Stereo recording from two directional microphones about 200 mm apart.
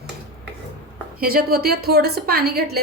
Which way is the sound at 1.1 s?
50° right (ahead or behind).